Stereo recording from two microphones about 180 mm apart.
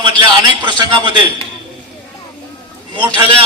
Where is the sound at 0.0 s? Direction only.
25° right (ahead or behind).